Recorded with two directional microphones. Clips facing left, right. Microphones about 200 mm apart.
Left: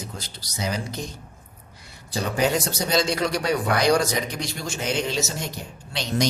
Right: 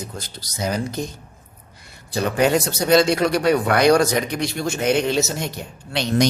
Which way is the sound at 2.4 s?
65° right (ahead or behind).